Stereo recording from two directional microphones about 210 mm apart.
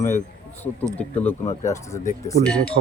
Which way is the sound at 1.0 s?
10° left (ahead or behind).